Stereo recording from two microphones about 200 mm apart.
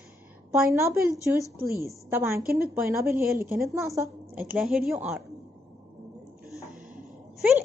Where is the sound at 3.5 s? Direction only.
15° right (ahead or behind).